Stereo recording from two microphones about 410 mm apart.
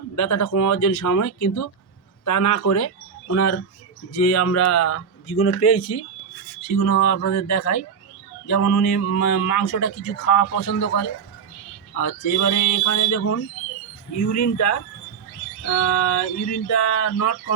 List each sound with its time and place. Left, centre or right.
0.2 s speech: left